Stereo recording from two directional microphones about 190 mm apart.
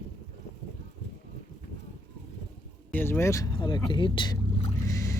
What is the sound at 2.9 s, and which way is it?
Speech, 10° left (ahead or behind).